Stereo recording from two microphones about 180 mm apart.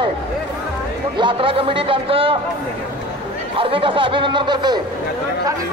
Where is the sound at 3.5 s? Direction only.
30° right (ahead or behind).